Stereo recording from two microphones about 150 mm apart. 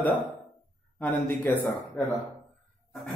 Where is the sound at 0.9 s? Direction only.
10° left (ahead or behind).